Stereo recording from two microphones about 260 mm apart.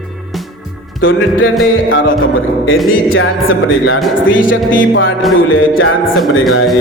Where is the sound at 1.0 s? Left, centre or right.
Left.